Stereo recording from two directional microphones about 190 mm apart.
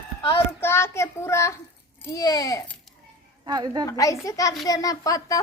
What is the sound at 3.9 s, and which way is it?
A child's voice, 15° left (ahead or behind).